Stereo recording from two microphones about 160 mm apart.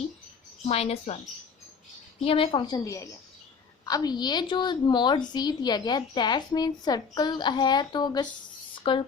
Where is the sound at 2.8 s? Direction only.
20° left (ahead or behind).